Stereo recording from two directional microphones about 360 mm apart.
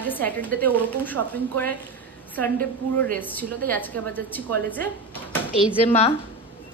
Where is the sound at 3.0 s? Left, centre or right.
Centre.